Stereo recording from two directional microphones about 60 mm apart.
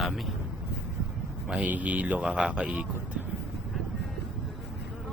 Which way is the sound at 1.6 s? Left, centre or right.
Right.